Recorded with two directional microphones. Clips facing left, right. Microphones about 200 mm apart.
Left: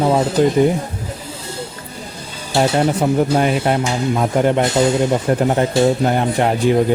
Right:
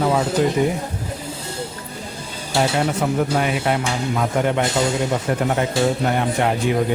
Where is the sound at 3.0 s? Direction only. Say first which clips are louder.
Left 5 dB; 30° left (ahead or behind).